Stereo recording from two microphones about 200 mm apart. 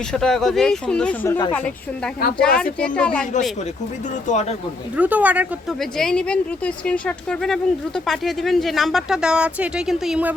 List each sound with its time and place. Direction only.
0.1 s speech: 5° left (ahead or behind)
2.4 s speech: 5° left (ahead or behind)
4.3 s speech: 35° left (ahead or behind)
4.9 s speech: 10° right (ahead or behind)